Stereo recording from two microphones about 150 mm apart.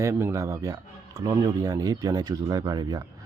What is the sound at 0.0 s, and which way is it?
Speech, 20° right (ahead or behind).